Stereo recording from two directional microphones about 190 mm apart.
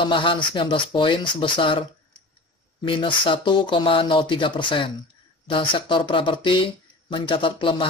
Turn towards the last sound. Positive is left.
turn(degrees=25)  # may be behind; listen again after turning